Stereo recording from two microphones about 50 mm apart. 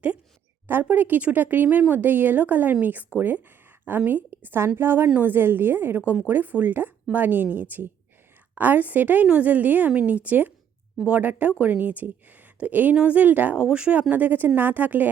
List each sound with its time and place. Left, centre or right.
0.7 s a woman's voice: right
13.6 s speech: right
14.1 s a woman's voice: right